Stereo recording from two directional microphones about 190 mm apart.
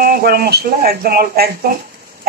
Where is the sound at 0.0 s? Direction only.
50° right (ahead or behind).